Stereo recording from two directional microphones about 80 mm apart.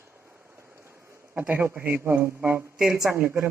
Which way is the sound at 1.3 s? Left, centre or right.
Right.